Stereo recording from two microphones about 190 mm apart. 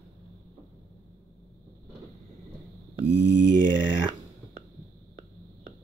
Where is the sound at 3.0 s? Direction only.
60° right (ahead or behind).